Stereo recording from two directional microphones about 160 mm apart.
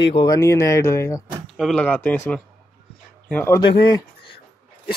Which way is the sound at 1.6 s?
5° left (ahead or behind).